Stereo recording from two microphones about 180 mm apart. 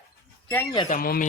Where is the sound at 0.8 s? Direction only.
50° left (ahead or behind).